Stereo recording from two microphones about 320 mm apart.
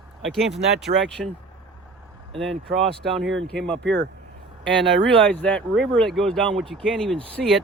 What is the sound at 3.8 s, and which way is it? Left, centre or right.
Speech, right.